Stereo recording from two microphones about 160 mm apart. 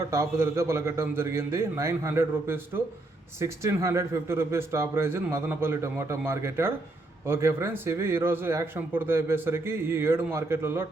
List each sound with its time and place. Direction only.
0.1 s speech: 15° right (ahead or behind)